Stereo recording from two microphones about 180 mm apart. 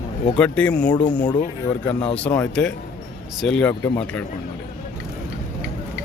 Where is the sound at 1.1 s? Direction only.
25° left (ahead or behind).